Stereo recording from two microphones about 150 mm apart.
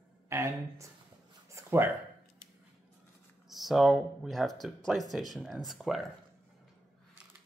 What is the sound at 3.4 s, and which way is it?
Speech, centre (ahead or behind).